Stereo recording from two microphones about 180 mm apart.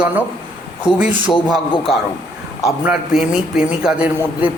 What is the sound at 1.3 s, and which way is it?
Speech, centre (ahead or behind).